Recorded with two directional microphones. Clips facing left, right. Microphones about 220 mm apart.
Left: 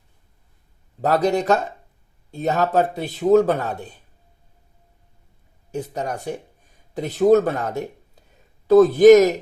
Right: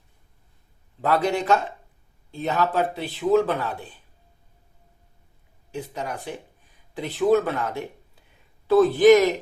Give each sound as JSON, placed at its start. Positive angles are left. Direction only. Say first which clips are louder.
{"t": 1.0, "sound": "a man's voice", "louder": "left 3 dB", "side_deg": 40}
{"t": 5.7, "sound": "speech", "louder": "left 4 dB", "side_deg": 45}